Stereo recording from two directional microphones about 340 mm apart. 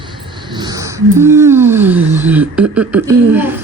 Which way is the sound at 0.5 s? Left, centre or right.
Centre.